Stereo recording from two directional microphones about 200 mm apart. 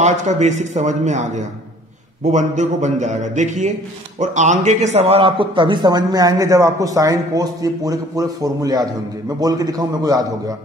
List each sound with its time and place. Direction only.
0.0 s a man's voice: 35° right (ahead or behind); by 10.2 s 20° right (ahead or behind)